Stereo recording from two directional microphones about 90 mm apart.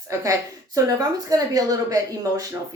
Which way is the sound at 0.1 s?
40° right (ahead or behind).